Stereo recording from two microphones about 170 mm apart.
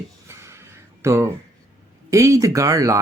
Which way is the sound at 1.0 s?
15° right (ahead or behind).